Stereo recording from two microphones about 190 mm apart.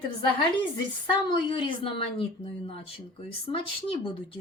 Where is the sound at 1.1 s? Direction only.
25° left (ahead or behind).